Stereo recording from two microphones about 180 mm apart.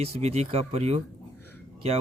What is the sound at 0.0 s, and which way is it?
Speech, 35° right (ahead or behind).